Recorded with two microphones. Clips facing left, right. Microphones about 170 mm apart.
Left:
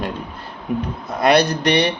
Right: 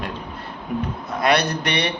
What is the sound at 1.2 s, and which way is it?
Speech, 35° left (ahead or behind).